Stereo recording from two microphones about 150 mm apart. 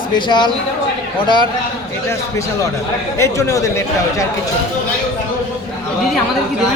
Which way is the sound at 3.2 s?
20° left (ahead or behind).